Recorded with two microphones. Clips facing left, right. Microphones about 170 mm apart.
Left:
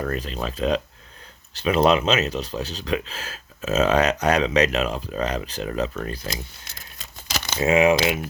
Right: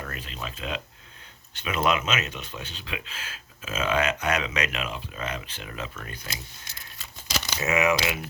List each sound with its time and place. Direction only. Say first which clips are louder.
0.0 s speech: left 10 dB; 40° left (ahead or behind)
7.3 s crumpling: left 2 dB; 50° left (ahead or behind)
7.6 s speech: left 7 dB; 30° left (ahead or behind)